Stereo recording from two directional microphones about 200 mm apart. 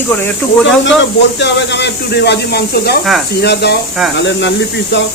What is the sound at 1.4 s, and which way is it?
Speech, 60° left (ahead or behind).